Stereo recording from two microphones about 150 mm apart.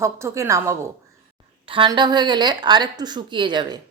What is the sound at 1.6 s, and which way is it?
A woman's voice, 35° right (ahead or behind).